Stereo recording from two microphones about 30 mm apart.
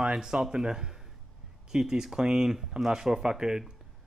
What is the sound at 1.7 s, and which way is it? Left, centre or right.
A man's voice, centre.